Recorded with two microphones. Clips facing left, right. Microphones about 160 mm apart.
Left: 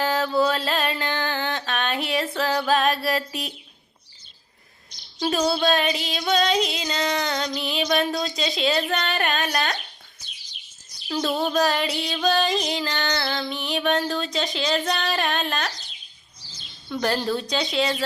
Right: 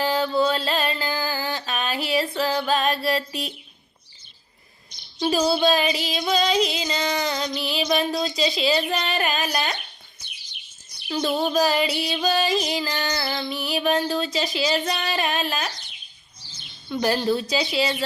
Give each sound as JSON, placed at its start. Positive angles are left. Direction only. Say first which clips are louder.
{"t": 0.0, "sound": "mantra", "louder": "even", "side_deg": 0}
{"t": 5.3, "sound": "music", "louder": "right 2 dB", "side_deg": -5}
{"t": 10.2, "sound": "chirp", "louder": "right 1 dB", "side_deg": -60}
{"t": 11.1, "sound": "music", "louder": "right 1 dB", "side_deg": 0}
{"t": 15.7, "sound": "a sound", "louder": "even", "side_deg": -60}
{"t": 16.9, "sound": "a woman's voice", "louder": "right 2 dB", "side_deg": -5}
{"t": 17.5, "sound": "music", "louder": "even", "side_deg": -5}